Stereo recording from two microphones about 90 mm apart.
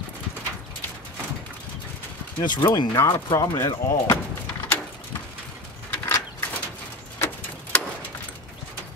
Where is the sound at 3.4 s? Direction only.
40° left (ahead or behind).